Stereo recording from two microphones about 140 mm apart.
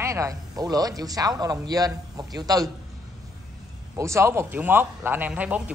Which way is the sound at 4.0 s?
20° right (ahead or behind).